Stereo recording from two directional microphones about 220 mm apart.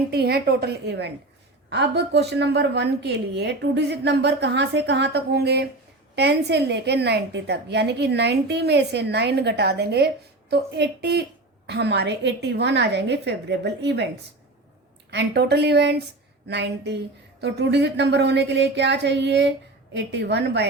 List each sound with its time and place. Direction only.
0.1 s a woman's voice: 45° right (ahead or behind)
15.1 s a woman's voice: 50° right (ahead or behind)